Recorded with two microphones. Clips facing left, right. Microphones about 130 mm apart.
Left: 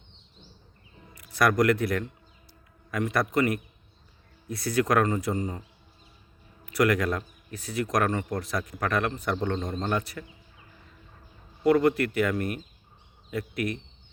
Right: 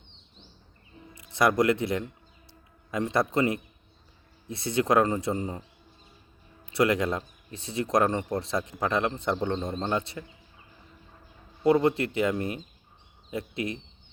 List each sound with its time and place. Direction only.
1.1 s speech: 25° right (ahead or behind)
2.5 s a sound: 25° right (ahead or behind)
4.4 s a man's voice: 25° right (ahead or behind)
6.7 s a man's voice: 25° right (ahead or behind)
11.6 s a man's voice: 25° right (ahead or behind)